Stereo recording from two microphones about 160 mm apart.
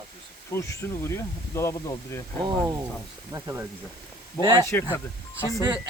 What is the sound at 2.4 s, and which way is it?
Speech, 25° right (ahead or behind).